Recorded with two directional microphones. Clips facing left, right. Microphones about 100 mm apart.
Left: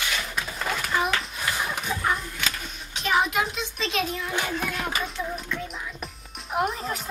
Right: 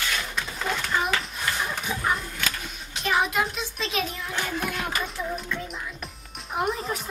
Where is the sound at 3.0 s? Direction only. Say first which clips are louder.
Left 1 dB; centre (ahead or behind).